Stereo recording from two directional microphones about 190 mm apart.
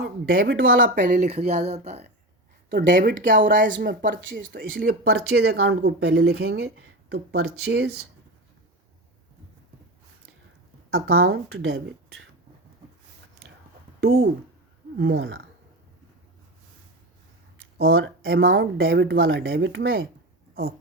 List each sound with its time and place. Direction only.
0.0 s speech: 90° right
0.9 s speech: 40° right (ahead or behind)
2.6 s speech: 65° right (ahead or behind)
3.2 s speech: 45° right (ahead or behind)
3.7 s speech: 65° right (ahead or behind)
4.1 s a sound: 75° right (ahead or behind)
4.8 s speech: 55° right (ahead or behind)
10.9 s speech: 85° right
14.9 s a sound: 70° right (ahead or behind)
17.8 s speech: 90° right